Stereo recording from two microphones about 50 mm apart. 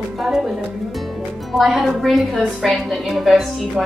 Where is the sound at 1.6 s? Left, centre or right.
Centre.